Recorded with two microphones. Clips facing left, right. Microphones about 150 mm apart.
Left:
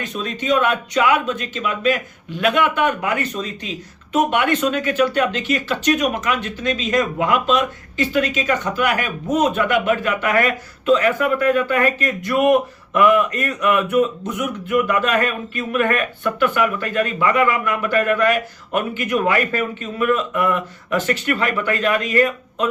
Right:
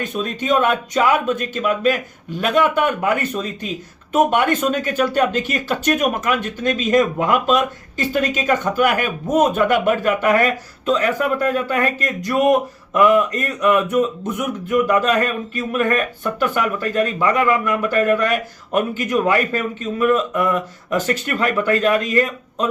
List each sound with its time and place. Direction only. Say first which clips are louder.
0.0 s speech: right 2 dB; 50° right (ahead or behind)